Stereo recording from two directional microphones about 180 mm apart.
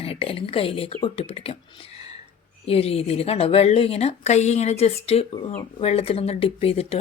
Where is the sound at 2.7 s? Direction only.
35° left (ahead or behind).